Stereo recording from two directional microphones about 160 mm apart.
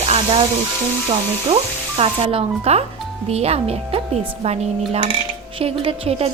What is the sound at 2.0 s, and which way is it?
A woman's voice, 40° right (ahead or behind).